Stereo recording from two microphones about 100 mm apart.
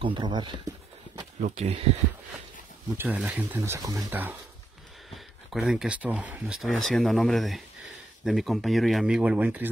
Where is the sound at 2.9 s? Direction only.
20° right (ahead or behind).